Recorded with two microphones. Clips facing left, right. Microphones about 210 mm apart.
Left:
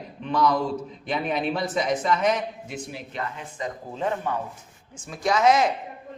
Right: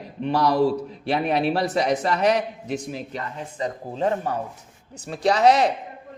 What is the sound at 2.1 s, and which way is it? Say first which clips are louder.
Speech: right 3 dB; 70° right (ahead or behind).